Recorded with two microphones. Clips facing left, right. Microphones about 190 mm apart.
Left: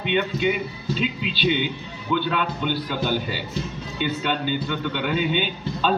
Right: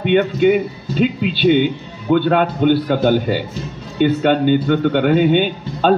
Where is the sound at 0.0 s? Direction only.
50° right (ahead or behind).